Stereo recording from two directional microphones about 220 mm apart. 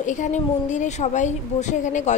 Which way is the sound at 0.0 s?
35° left (ahead or behind).